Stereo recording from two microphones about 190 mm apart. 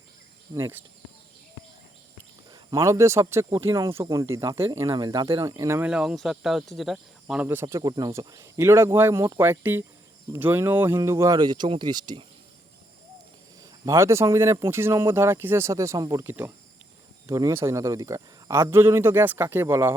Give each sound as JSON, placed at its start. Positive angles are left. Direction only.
{"t": 0.5, "sound": "speech", "side_deg": -10}
{"t": 2.5, "sound": "speech", "side_deg": -20}
{"t": 7.4, "sound": "speech", "side_deg": -15}
{"t": 13.6, "sound": "speech", "side_deg": -15}